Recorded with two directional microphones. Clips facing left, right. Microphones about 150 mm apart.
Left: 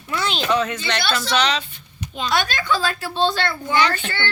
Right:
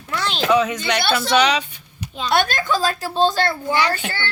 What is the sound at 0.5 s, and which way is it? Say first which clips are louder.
Speech: right 5 dB; 10° right (ahead or behind).